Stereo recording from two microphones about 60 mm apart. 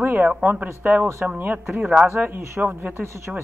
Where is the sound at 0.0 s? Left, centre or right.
Right.